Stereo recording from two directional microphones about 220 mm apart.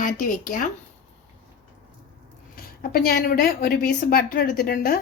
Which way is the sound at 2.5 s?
45° left (ahead or behind).